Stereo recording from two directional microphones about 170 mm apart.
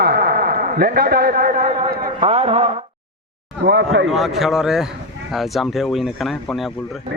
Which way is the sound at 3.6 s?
90° right.